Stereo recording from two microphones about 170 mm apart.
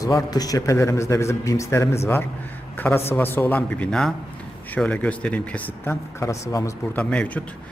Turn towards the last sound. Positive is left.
turn(degrees=10)  # may be behind; listen again after turning